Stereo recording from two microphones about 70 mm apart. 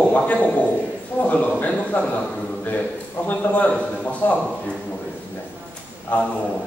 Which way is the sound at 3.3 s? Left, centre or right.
Centre.